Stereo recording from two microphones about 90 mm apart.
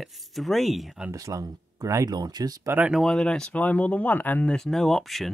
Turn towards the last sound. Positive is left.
turn(degrees=0)  # may be behind; listen again after turning